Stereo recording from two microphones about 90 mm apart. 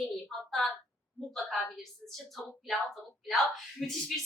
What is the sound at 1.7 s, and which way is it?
Speech, centre (ahead or behind).